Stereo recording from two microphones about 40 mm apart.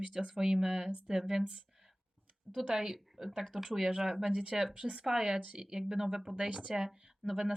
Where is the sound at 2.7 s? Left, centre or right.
Centre.